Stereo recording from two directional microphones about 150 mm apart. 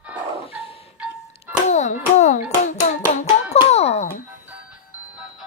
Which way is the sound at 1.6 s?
50° left (ahead or behind).